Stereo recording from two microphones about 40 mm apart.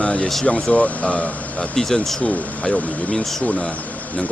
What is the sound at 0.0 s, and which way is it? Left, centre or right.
Vehicle, left.